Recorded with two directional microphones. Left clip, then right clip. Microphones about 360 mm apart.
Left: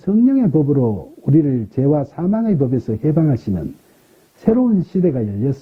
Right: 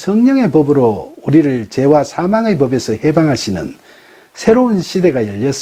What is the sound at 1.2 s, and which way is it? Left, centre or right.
Speech, centre.